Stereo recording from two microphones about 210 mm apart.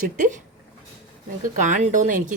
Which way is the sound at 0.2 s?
35° right (ahead or behind).